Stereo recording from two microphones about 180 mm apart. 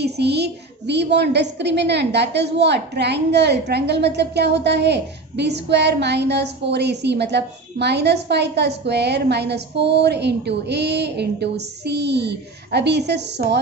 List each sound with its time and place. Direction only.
0.0 s a child's voice: 65° right (ahead or behind)